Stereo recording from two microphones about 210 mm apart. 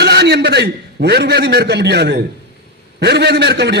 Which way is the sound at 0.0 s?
50° right (ahead or behind).